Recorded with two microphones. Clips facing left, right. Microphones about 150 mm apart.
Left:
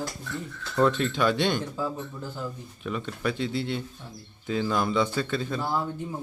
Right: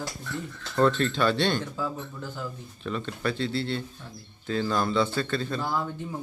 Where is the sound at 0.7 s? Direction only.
10° left (ahead or behind).